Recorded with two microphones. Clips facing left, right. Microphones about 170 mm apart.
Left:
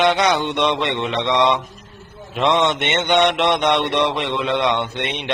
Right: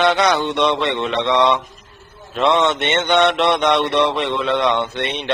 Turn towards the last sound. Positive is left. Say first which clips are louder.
# right 2 dB
turn(degrees=15)  # may be behind; listen again after turning